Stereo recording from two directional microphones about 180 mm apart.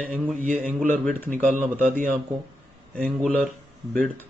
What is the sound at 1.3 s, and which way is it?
Speech, 45° right (ahead or behind).